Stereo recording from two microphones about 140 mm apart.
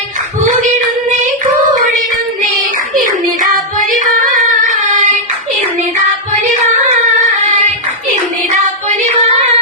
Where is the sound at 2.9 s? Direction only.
75° right (ahead or behind).